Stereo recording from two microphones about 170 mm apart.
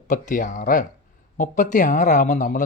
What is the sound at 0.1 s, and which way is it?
Speech, 45° left (ahead or behind).